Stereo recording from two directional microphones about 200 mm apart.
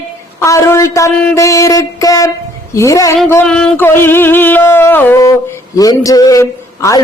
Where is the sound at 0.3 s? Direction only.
15° left (ahead or behind).